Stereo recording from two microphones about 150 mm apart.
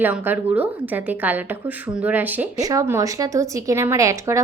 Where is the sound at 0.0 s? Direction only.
10° right (ahead or behind).